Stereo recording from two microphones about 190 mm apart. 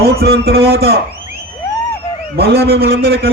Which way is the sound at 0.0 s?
55° right (ahead or behind).